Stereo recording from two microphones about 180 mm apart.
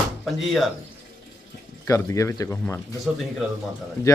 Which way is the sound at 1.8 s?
15° left (ahead or behind).